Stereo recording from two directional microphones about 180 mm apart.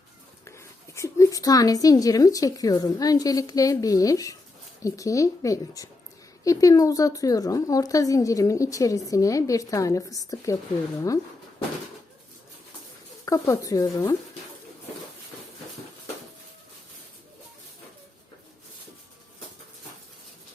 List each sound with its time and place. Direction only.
0.4 s a woman's voice: 15° left (ahead or behind)
13.2 s speech: 15° left (ahead or behind)